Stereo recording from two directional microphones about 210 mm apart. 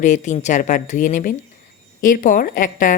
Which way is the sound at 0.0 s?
35° left (ahead or behind).